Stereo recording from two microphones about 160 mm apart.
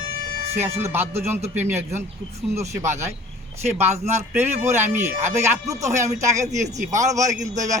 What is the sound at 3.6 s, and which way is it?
Speech, 40° right (ahead or behind).